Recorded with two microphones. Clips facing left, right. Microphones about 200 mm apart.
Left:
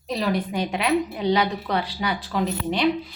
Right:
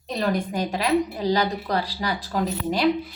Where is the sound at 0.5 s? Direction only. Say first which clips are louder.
Even; 40° right (ahead or behind).